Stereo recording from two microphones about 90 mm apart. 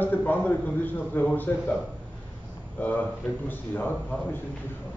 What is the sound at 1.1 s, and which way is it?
Speech, 20° left (ahead or behind).